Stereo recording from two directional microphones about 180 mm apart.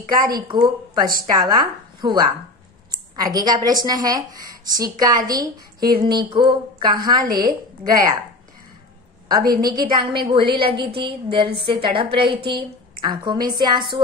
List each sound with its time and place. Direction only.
0.2 s speech: 25° right (ahead or behind)
9.5 s speech: 20° right (ahead or behind)